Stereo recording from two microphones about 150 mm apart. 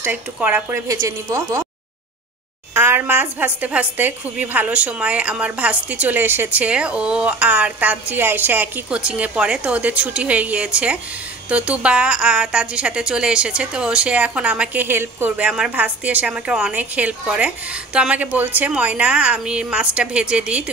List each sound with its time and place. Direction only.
0.0 s a woman's voice: 10° right (ahead or behind)
2.7 s a woman's voice: 15° right (ahead or behind)